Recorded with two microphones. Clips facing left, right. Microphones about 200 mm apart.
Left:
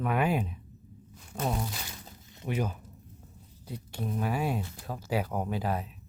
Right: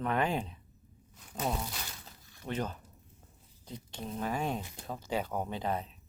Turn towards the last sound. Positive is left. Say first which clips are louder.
# left 3 dB
turn(degrees=5)  # may be behind; listen again after turning